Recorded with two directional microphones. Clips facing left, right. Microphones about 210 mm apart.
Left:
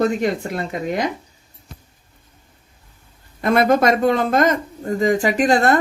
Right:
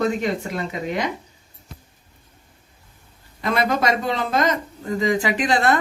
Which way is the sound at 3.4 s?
50° left (ahead or behind).